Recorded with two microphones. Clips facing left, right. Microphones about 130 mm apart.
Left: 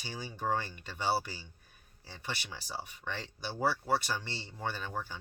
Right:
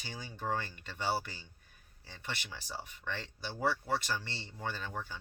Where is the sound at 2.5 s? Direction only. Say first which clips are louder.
Left 2 dB; 15° left (ahead or behind).